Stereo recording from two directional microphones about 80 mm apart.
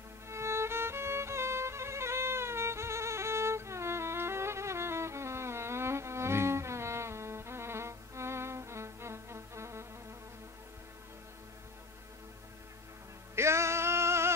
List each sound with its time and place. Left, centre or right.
0.3 s music: right
13.4 s male singing: right